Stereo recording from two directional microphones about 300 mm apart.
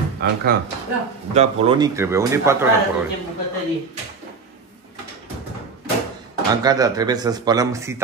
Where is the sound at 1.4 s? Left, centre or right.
Centre.